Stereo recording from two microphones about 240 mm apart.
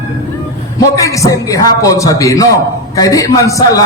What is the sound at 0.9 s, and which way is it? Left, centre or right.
A man's voice, centre.